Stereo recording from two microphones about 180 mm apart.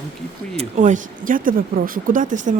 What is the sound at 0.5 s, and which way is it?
Speech, 45° right (ahead or behind).